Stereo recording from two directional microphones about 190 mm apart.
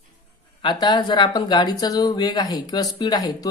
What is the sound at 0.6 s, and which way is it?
Speech, 25° left (ahead or behind).